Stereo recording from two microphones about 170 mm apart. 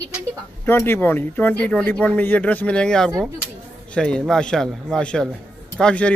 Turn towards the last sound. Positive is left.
turn(degrees=5)  # may be behind; listen again after turning